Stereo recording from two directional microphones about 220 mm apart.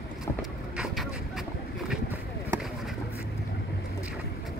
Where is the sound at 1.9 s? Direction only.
10° right (ahead or behind).